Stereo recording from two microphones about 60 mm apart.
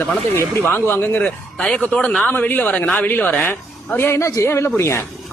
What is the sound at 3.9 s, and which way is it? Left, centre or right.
A man's voice, left.